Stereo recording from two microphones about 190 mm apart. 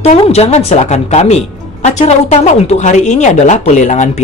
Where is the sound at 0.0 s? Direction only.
35° left (ahead or behind).